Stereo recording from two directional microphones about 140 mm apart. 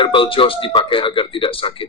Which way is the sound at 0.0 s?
40° left (ahead or behind).